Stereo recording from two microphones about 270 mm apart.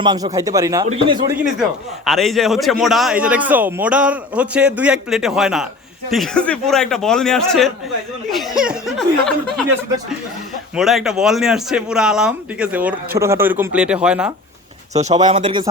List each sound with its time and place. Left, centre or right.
0.0 s speech: centre
1.3 s a man's voice: centre
10.8 s a man's voice: centre
14.9 s speech: right